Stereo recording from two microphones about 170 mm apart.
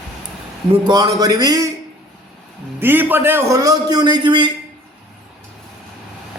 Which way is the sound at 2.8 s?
10° right (ahead or behind).